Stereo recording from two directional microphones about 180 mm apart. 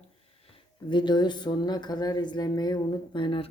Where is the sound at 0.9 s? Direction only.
25° left (ahead or behind).